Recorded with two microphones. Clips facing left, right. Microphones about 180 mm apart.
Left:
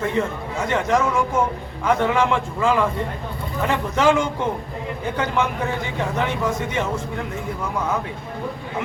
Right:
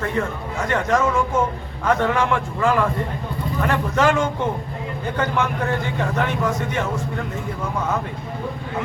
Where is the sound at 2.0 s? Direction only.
15° left (ahead or behind).